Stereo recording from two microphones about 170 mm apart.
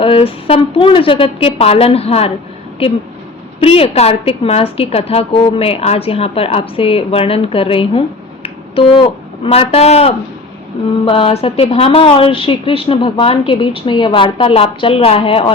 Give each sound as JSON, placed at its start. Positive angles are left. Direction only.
{"t": 0.0, "sound": "a woman's voice", "side_deg": 30}
{"t": 3.6, "sound": "a woman's voice", "side_deg": 35}